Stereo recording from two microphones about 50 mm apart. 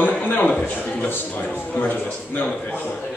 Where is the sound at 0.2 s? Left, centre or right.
Left.